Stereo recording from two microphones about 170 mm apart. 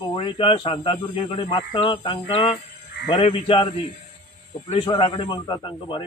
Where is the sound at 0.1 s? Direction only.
30° left (ahead or behind).